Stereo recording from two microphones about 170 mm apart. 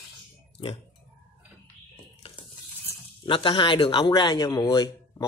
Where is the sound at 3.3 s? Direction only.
30° left (ahead or behind).